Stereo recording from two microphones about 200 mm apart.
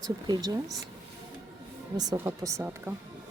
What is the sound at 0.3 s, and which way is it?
Speech, 20° right (ahead or behind).